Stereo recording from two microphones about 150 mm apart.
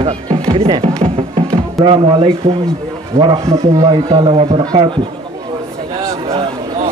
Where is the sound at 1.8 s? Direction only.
Centre (ahead or behind).